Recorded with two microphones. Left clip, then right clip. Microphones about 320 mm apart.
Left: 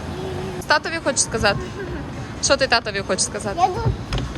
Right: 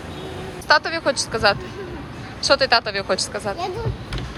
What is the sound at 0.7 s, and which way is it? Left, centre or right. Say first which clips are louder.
Speech: right 2 dB; centre.